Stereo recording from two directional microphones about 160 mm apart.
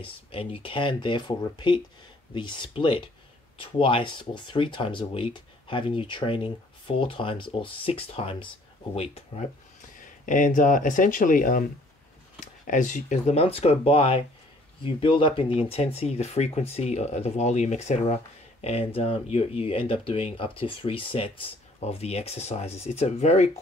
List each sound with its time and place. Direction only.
0.0 s speech: 35° left (ahead or behind)
9.9 s speech: 55° left (ahead or behind)
12.6 s speech: 50° left (ahead or behind)